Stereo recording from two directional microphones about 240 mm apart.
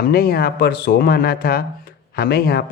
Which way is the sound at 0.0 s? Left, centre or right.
Left.